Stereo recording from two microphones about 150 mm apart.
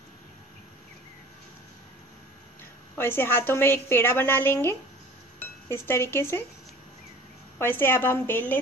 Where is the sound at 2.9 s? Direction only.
15° left (ahead or behind).